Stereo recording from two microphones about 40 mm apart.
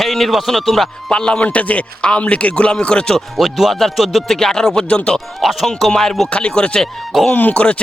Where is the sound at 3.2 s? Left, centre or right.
Centre.